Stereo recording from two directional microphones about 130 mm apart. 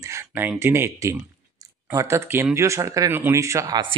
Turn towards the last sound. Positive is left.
turn(degrees=-30)  # may be behind; listen again after turning